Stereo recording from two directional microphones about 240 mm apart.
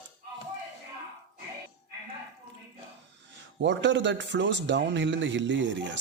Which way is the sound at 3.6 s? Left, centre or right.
Right.